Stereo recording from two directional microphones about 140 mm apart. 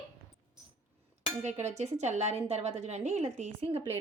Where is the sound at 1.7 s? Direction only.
55° right (ahead or behind).